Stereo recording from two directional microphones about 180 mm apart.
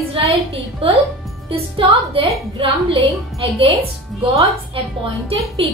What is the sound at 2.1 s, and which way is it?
A woman's voice, 30° right (ahead or behind).